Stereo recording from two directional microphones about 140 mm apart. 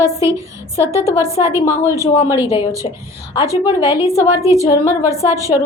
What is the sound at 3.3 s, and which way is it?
Speech, 30° left (ahead or behind).